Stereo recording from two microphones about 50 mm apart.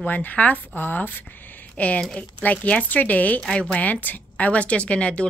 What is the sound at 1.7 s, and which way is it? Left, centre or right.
A woman's voice, left.